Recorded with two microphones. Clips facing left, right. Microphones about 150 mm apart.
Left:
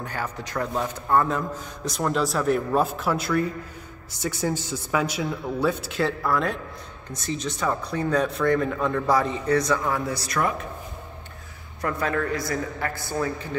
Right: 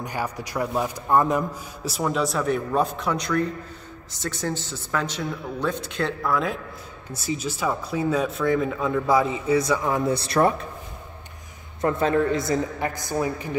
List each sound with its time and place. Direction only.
0.0 s a man's voice: 10° right (ahead or behind)
1.9 s speech: 5° right (ahead or behind)
9.8 s a woman's voice: 20° right (ahead or behind)
11.8 s a woman's voice: 25° right (ahead or behind)